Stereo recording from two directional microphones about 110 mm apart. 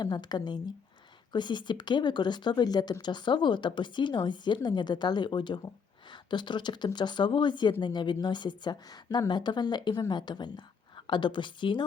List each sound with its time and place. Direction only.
0.0 s speech: 40° left (ahead or behind)